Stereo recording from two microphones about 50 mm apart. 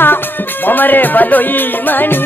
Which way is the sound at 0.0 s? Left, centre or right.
Left.